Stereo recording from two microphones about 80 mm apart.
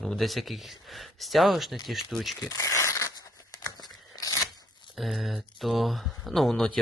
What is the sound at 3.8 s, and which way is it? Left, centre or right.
Tearing, left.